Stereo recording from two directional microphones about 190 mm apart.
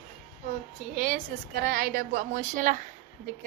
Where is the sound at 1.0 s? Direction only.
45° right (ahead or behind).